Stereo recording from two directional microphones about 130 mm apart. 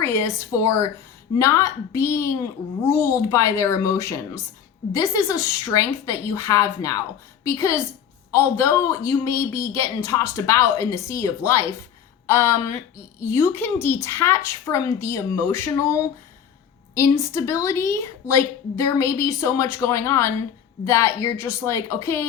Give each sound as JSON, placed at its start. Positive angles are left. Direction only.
{"t": 0.0, "sound": "a woman's voice", "side_deg": 20}